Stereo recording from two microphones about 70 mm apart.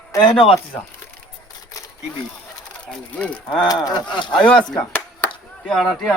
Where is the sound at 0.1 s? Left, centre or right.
Left.